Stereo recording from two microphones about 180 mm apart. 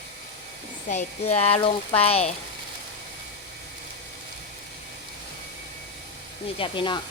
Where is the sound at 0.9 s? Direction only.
40° left (ahead or behind).